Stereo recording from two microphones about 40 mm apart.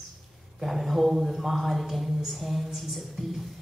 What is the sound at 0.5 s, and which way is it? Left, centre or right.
Speech, centre.